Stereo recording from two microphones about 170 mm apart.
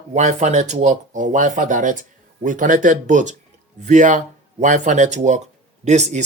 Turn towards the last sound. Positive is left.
turn(degrees=-40)  # may be behind; listen again after turning